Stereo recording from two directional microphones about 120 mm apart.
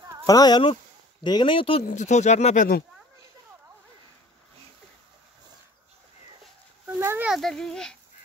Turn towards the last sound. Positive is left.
turn(degrees=5)  # may be behind; listen again after turning